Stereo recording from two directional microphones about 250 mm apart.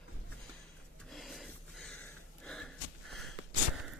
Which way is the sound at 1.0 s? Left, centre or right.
Centre.